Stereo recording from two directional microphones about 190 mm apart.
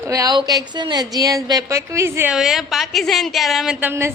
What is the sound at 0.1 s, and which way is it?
A woman's voice, 20° right (ahead or behind).